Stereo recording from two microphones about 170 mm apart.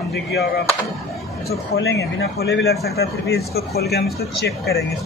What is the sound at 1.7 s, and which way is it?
Speech, 70° left (ahead or behind).